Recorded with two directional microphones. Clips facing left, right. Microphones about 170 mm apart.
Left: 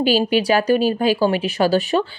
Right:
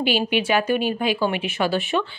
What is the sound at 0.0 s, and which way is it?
Speech, 40° left (ahead or behind).